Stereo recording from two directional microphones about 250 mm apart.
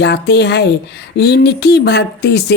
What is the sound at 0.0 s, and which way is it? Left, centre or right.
Speech, left.